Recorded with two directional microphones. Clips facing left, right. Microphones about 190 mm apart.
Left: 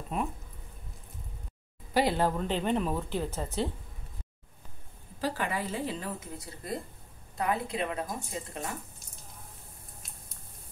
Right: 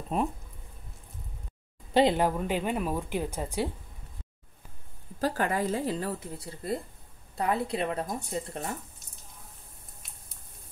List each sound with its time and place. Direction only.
2.0 s speech: 20° right (ahead or behind)
5.2 s a woman's voice: 45° right (ahead or behind)